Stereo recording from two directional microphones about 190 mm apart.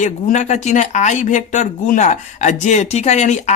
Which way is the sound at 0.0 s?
40° left (ahead or behind).